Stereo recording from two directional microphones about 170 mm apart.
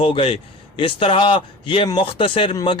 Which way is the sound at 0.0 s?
35° left (ahead or behind).